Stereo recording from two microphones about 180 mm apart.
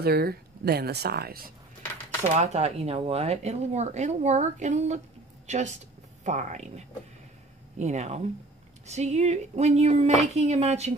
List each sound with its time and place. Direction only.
0.0 s speech: 60° right (ahead or behind)
2.3 s speech: 35° right (ahead or behind)